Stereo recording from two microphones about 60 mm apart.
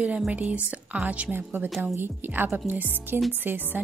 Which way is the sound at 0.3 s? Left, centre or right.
Right.